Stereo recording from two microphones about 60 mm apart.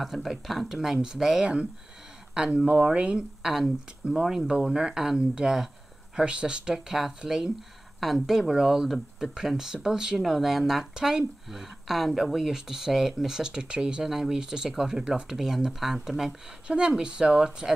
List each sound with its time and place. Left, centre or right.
0.0 s speech: centre